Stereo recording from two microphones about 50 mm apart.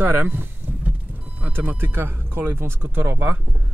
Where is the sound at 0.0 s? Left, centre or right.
Right.